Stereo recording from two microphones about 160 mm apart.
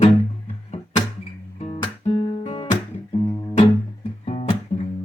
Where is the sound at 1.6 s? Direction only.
35° left (ahead or behind).